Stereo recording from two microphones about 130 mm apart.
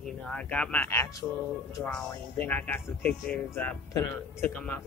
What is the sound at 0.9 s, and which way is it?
Speech, 20° left (ahead or behind).